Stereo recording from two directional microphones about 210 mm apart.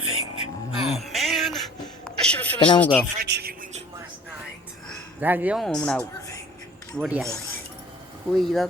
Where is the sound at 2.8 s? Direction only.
5° left (ahead or behind).